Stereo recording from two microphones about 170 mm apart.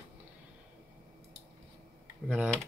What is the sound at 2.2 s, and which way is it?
Speech, 5° right (ahead or behind).